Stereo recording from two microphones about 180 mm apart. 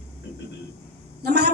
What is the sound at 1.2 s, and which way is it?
Speech, 65° right (ahead or behind).